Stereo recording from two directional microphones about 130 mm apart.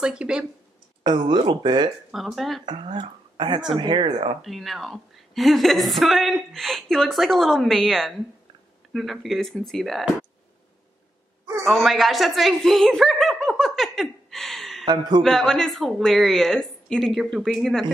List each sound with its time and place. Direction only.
0.0 s a woman's voice: 5° right (ahead or behind)
1.0 s speech: 35° right (ahead or behind)
2.0 s a woman's voice: 5° right (ahead or behind)
2.6 s speech: 35° right (ahead or behind)
4.4 s a woman's voice: centre (ahead or behind)
11.6 s chuckle: centre (ahead or behind)
14.9 s speech: 35° right (ahead or behind)
15.2 s a woman's voice: centre (ahead or behind)